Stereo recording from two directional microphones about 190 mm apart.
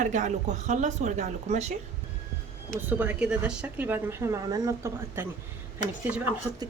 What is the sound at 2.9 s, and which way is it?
A woman's voice, 10° right (ahead or behind).